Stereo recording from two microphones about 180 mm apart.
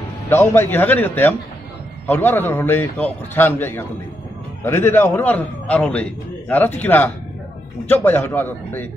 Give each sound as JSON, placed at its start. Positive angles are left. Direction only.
{"t": 0.3, "sound": "a man's voice", "side_deg": 15}